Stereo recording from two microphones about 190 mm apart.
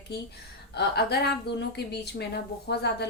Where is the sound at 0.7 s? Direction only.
60° left (ahead or behind).